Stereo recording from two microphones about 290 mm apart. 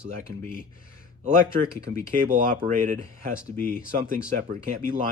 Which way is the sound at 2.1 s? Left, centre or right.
Right.